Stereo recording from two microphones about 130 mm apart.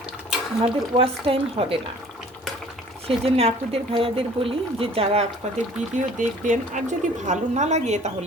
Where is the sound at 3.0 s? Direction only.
50° right (ahead or behind).